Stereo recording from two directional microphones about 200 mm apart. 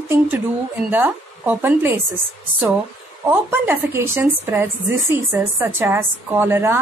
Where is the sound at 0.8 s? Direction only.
10° right (ahead or behind).